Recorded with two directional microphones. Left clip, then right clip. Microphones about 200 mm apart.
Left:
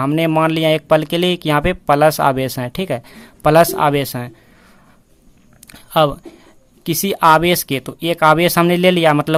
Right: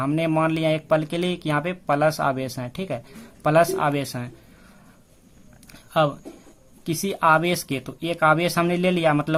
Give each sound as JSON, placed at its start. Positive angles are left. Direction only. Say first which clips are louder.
{"t": 0.0, "sound": "speech", "louder": "left 7 dB", "side_deg": 30}
{"t": 5.6, "sound": "a sound", "louder": "left 7 dB", "side_deg": 30}
{"t": 6.8, "sound": "speech", "louder": "left 7 dB", "side_deg": 30}